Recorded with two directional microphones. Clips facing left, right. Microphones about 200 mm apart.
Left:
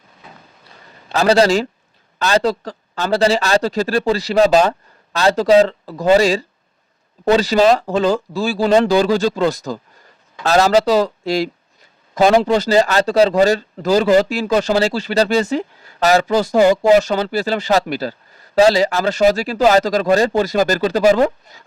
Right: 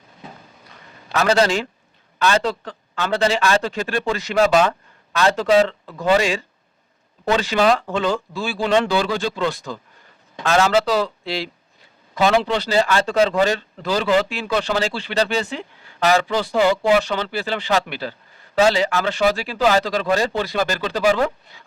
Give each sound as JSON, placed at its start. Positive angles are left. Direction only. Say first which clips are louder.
{"t": 1.1, "sound": "speech", "louder": "left 4 dB", "side_deg": 35}